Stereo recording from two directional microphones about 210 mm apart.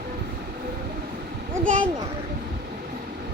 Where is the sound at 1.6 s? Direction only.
40° right (ahead or behind).